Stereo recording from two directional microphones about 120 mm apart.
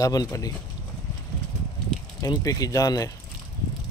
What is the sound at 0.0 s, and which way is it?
Speech, 30° left (ahead or behind).